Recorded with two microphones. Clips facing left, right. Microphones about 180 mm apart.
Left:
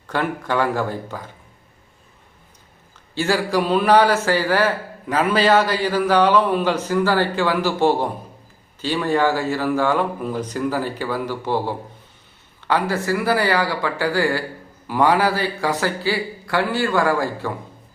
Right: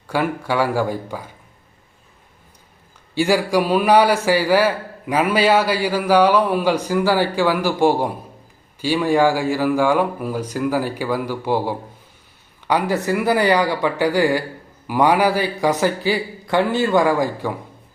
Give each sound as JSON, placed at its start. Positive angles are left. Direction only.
{"t": 0.1, "sound": "a man's voice", "side_deg": -10}
{"t": 3.2, "sound": "a man's voice", "side_deg": -15}